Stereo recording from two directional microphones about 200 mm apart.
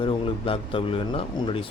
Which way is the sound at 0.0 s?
25° left (ahead or behind).